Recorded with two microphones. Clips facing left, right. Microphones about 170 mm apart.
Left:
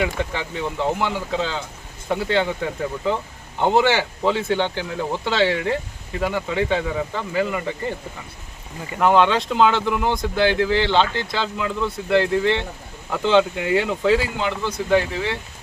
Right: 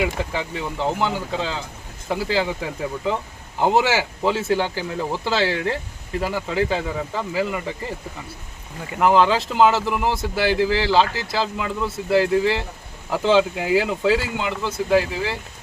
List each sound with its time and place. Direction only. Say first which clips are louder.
0.0 s speech: even; centre (ahead or behind)